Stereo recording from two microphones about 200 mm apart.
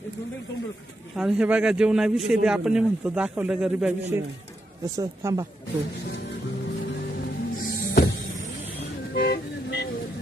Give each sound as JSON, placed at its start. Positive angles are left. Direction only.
{"t": 1.1, "sound": "speech", "side_deg": -5}
{"t": 4.9, "sound": "a woman's voice", "side_deg": -15}
{"t": 9.1, "sound": "vehicle", "side_deg": 55}